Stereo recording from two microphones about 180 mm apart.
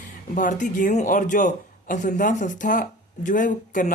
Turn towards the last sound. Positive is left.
turn(degrees=45)  # may be behind; listen again after turning